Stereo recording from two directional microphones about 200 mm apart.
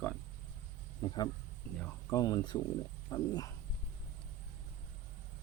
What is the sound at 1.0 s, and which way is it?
Speech, 20° left (ahead or behind).